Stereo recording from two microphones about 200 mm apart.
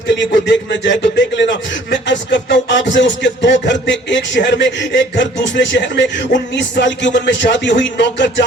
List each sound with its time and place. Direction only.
0.2 s a man's voice: 60° left (ahead or behind)